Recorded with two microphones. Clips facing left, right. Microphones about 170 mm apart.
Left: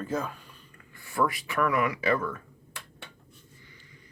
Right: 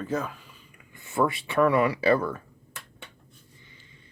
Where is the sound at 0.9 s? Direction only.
20° right (ahead or behind).